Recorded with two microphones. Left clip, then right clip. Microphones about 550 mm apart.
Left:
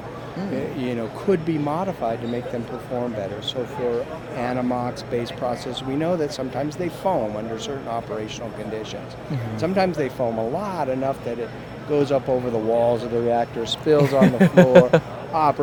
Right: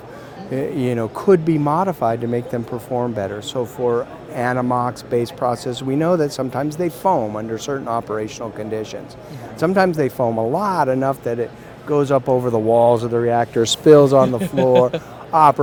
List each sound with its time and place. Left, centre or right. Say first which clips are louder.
0.8 s speech: right 5 dB; right
14.3 s a man's voice: left 1 dB; left
15.3 s speech: right 7 dB; right